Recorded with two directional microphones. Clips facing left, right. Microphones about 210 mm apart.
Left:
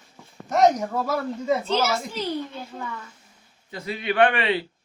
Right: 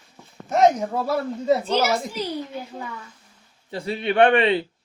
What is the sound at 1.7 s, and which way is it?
A child's voice, 15° right (ahead or behind).